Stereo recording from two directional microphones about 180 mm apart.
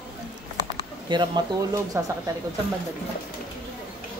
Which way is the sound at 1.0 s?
25° right (ahead or behind).